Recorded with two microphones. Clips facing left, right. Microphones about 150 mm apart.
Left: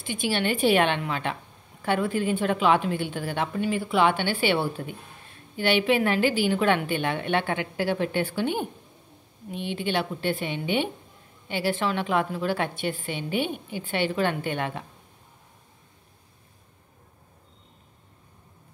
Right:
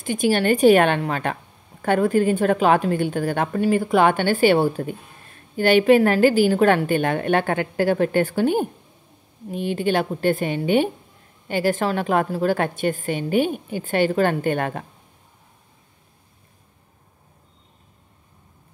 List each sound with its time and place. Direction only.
0.0 s a woman's voice: 45° right (ahead or behind)